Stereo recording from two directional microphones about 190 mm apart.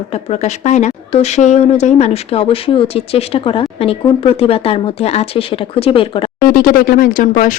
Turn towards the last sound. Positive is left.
turn(degrees=45)  # may be behind; listen again after turning